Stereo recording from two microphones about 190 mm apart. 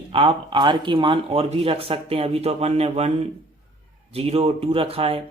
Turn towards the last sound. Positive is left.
turn(degrees=-30)  # may be behind; listen again after turning